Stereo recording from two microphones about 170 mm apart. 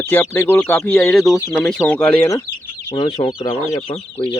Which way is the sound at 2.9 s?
30° left (ahead or behind).